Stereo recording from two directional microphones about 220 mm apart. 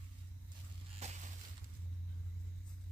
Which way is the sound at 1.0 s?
30° right (ahead or behind).